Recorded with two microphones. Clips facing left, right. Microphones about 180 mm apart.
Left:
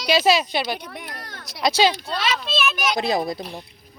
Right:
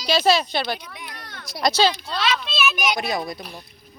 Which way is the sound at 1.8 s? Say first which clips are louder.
Left 1 dB; 35° left (ahead or behind).